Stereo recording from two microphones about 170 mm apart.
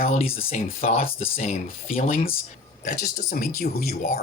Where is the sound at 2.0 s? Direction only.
55° left (ahead or behind).